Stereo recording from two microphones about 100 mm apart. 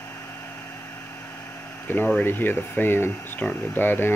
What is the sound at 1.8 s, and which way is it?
Speech, 20° left (ahead or behind).